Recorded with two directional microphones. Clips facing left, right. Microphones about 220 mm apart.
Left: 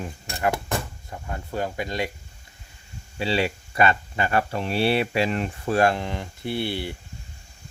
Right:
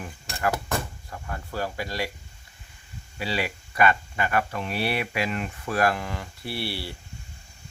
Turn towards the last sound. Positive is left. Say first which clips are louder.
# left 5 dB
turn(degrees=20)  # may be behind; listen again after turning